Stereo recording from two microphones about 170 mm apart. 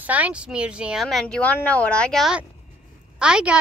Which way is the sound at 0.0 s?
10° right (ahead or behind).